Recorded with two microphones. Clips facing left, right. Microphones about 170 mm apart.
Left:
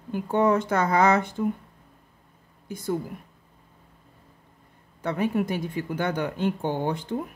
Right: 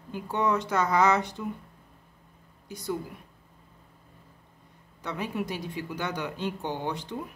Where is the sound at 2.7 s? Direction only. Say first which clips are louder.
Left 4 dB; 50° left (ahead or behind).